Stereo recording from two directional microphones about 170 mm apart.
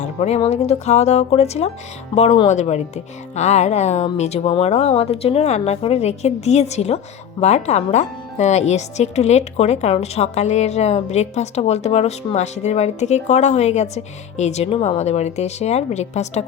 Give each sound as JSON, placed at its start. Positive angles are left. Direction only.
{"t": 0.0, "sound": "speech", "side_deg": 40}